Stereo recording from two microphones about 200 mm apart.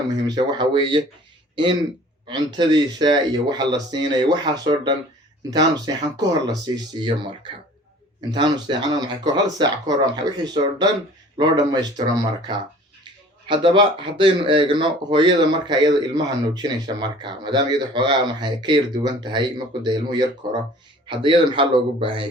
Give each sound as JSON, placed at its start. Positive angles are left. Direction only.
{"t": 0.3, "sound": "speech", "side_deg": -20}
{"t": 2.2, "sound": "speech", "side_deg": -20}
{"t": 8.3, "sound": "speech", "side_deg": -20}